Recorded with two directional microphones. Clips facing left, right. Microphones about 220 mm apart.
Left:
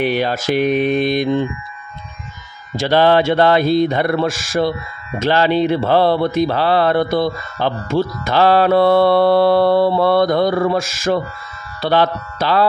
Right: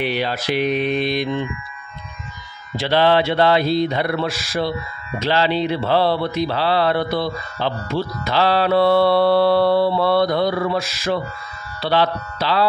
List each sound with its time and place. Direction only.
0.0 s speech: 50° left (ahead or behind)
2.7 s speech: 45° left (ahead or behind)